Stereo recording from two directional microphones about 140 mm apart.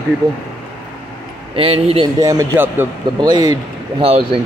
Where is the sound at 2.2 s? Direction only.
20° right (ahead or behind).